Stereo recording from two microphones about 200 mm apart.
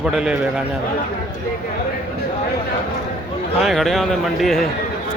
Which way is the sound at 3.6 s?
Centre (ahead or behind).